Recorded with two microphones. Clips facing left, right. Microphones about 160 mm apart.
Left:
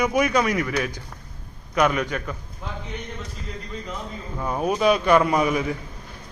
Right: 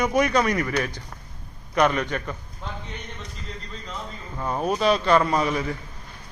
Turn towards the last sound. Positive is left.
turn(degrees=15)  # may be behind; listen again after turning